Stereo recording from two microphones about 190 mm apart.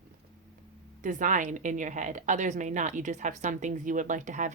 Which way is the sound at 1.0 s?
40° right (ahead or behind).